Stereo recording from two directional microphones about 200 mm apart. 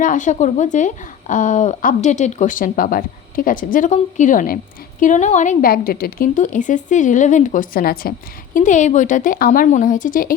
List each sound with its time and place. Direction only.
0.0 s a woman's voice: 40° left (ahead or behind)